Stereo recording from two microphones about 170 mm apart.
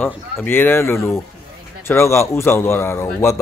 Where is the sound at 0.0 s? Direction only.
10° left (ahead or behind).